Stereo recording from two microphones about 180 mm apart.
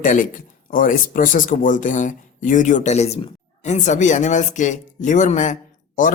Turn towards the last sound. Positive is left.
turn(degrees=45)  # may be behind; listen again after turning